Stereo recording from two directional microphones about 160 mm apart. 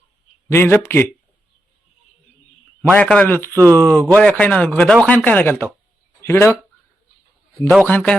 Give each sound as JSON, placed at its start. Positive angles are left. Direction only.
{"t": 0.5, "sound": "speech", "side_deg": 15}
{"t": 2.9, "sound": "speech", "side_deg": 10}
{"t": 7.9, "sound": "speech", "side_deg": 10}